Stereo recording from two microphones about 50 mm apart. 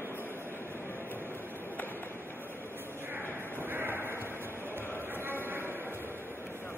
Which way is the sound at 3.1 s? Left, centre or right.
Right.